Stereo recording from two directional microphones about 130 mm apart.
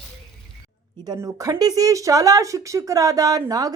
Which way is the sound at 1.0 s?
30° right (ahead or behind).